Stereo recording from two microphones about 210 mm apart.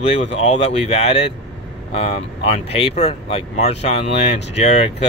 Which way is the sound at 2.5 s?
30° left (ahead or behind).